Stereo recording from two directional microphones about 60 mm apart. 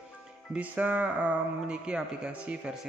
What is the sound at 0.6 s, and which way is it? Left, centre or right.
A man's voice, right.